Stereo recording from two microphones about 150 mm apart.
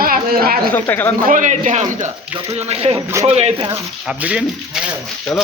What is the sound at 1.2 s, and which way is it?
Speech, 60° right (ahead or behind).